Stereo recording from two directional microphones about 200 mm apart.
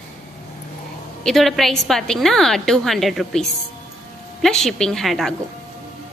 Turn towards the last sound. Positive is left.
turn(degrees=0)  # may be behind; listen again after turning